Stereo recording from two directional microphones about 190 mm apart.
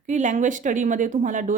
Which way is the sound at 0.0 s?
40° right (ahead or behind).